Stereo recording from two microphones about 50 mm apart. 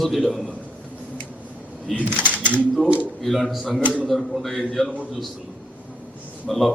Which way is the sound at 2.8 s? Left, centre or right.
Right.